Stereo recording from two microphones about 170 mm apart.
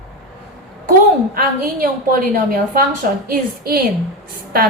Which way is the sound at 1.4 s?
55° right (ahead or behind).